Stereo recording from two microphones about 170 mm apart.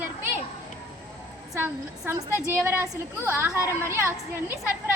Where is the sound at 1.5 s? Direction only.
15° right (ahead or behind).